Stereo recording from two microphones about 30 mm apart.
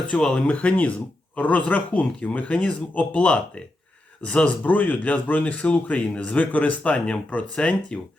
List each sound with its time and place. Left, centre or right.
0.4 s speech: left
2.9 s speech: left
3.2 s speech: left
4.6 s speech: left
6.9 s speech: left